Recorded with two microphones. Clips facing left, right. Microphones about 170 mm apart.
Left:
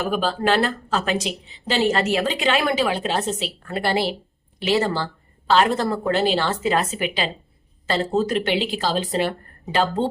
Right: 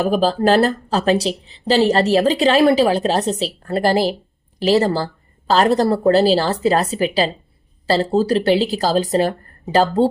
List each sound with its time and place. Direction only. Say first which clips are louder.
0.0 s speech: right 6 dB; 35° right (ahead or behind)